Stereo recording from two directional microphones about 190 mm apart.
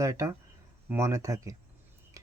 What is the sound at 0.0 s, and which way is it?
Speech, 15° right (ahead or behind).